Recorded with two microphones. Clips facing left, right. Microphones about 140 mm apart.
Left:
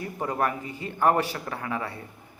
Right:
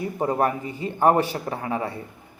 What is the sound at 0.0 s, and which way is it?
Speech, 30° right (ahead or behind).